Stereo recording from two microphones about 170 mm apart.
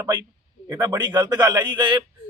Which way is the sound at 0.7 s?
25° right (ahead or behind).